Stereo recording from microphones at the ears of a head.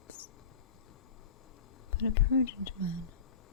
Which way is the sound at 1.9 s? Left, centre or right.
Left.